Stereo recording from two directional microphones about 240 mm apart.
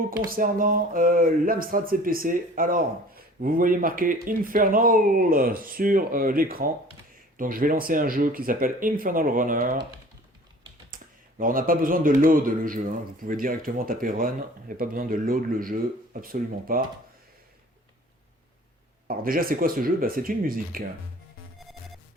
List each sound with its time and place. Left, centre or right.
0.3 s speech: right
10.9 s speech: right
19.0 s speech: right